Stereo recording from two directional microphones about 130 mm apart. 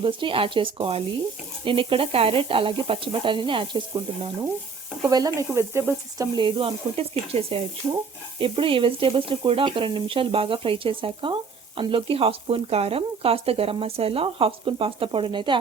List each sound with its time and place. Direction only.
0.0 s speech: 40° right (ahead or behind)
5.0 s speech: 25° right (ahead or behind)
6.3 s speech: 40° right (ahead or behind)